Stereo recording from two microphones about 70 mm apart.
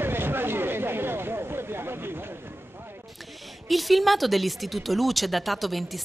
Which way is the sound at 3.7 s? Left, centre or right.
Centre.